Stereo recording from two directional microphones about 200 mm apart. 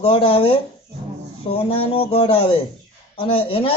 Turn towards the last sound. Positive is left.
turn(degrees=25)  # may be behind; listen again after turning